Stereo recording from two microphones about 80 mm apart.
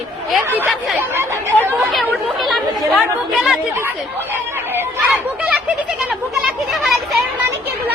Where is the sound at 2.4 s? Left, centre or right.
Centre.